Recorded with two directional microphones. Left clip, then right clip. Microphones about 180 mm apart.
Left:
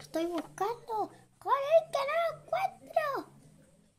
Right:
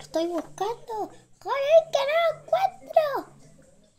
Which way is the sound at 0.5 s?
25° left (ahead or behind).